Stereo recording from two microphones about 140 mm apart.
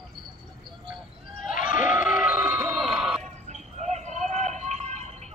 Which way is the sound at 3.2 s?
55° right (ahead or behind).